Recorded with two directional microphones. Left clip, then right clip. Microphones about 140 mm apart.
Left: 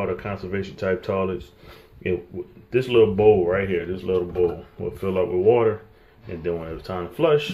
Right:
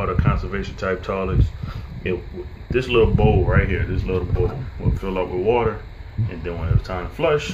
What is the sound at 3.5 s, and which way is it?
Speech, 30° left (ahead or behind).